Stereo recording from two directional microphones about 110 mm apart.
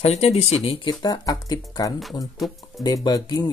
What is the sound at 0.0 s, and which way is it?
Speech, 65° left (ahead or behind).